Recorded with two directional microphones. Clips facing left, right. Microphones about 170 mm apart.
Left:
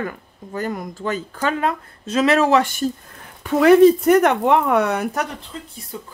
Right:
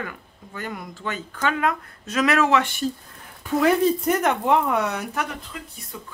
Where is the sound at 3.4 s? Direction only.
70° left (ahead or behind).